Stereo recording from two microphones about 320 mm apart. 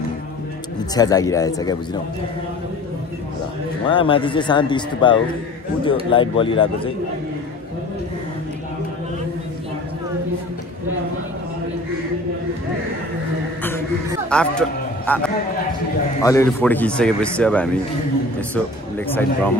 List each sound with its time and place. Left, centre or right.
0.9 s speech: centre
3.8 s speech: centre
14.3 s a man's voice: centre
16.2 s speech: centre
19.0 s speech: centre